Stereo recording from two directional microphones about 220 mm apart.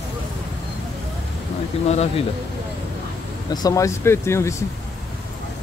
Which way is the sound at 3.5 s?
15° left (ahead or behind).